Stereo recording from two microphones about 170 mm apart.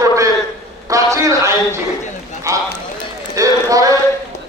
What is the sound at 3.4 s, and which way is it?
Clip-clop, 20° right (ahead or behind).